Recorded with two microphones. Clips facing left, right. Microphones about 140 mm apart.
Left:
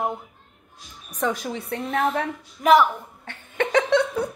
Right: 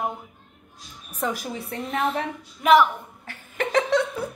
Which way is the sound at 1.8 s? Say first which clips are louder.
Left 2 dB; centre (ahead or behind).